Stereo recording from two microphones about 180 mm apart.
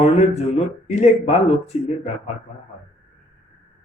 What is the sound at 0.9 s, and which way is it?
Speech, 35° left (ahead or behind).